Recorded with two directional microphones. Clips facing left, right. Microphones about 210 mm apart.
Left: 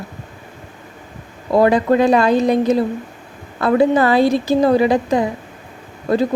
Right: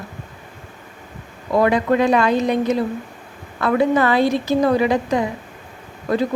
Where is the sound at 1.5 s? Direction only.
35° left (ahead or behind).